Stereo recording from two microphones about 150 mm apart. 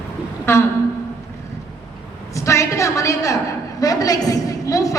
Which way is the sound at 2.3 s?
20° left (ahead or behind).